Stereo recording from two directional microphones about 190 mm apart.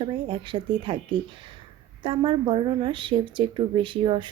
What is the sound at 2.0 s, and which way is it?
A woman's voice, 25° right (ahead or behind).